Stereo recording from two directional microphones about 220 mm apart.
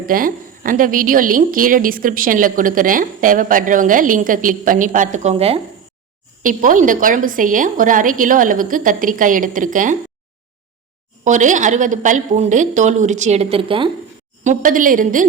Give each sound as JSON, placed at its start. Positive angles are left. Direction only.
{"t": 0.0, "sound": "a woman's voice", "side_deg": -40}
{"t": 6.4, "sound": "a woman's voice", "side_deg": -35}
{"t": 11.2, "sound": "a woman's voice", "side_deg": -35}
{"t": 14.4, "sound": "a woman's voice", "side_deg": -35}